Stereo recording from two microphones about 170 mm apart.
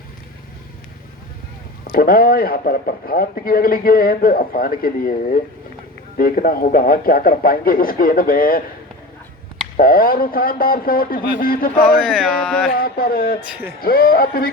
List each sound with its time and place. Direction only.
1.9 s a man's voice: 60° left (ahead or behind)
9.7 s a man's voice: 60° left (ahead or behind)
11.8 s a sound: 5° left (ahead or behind)
12.7 s a man's voice: 60° left (ahead or behind)